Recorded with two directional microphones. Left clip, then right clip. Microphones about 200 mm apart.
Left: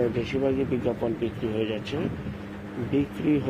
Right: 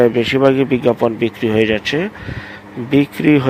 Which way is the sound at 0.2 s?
40° right (ahead or behind).